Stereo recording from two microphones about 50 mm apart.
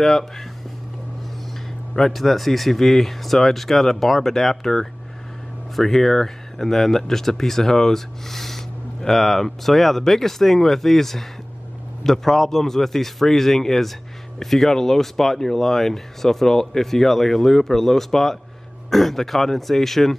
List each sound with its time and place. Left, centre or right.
0.0 s speech: centre
2.0 s speech: centre